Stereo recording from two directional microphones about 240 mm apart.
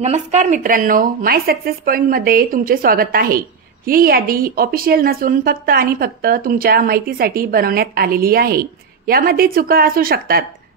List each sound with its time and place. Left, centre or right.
0.0 s speech: right